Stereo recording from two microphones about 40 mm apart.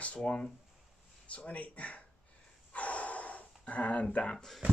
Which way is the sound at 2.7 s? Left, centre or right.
Left.